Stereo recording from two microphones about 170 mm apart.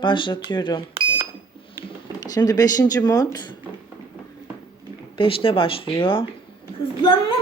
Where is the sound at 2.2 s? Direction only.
20° left (ahead or behind).